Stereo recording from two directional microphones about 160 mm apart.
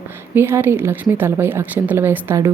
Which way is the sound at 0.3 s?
15° right (ahead or behind).